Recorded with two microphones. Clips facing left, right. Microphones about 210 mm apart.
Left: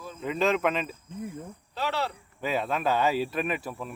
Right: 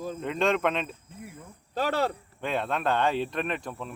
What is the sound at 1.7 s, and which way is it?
Speech, 50° right (ahead or behind).